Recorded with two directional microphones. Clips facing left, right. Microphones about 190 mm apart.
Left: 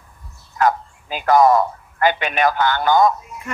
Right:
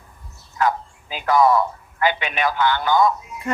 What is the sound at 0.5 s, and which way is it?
Bow-wow, 50° left (ahead or behind).